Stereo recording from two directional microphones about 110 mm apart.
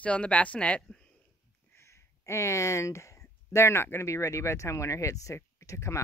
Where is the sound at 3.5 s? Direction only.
25° left (ahead or behind).